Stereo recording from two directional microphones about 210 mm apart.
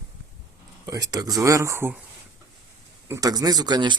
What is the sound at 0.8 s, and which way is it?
Speech, 15° right (ahead or behind).